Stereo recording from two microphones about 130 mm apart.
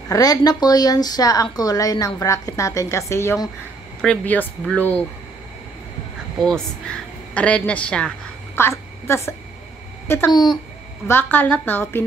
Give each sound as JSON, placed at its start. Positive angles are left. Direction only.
{"t": 0.1, "sound": "speech", "side_deg": 30}
{"t": 4.0, "sound": "speech", "side_deg": 10}
{"t": 6.4, "sound": "a woman's voice", "side_deg": 5}
{"t": 8.5, "sound": "a sound", "side_deg": 20}
{"t": 10.0, "sound": "speech", "side_deg": 20}
{"t": 10.3, "sound": "speech", "side_deg": 35}
{"t": 11.1, "sound": "speech", "side_deg": 15}